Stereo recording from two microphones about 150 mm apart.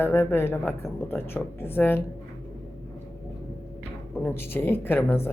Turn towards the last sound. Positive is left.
turn(degrees=15)  # may be behind; listen again after turning